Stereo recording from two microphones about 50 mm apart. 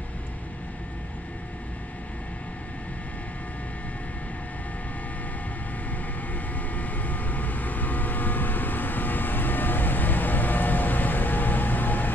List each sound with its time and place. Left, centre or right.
6.7 s vehicle: left